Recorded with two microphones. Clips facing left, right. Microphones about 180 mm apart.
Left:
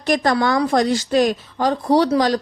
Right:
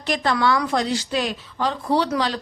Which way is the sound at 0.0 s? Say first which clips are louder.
Left 4 dB; 45° left (ahead or behind).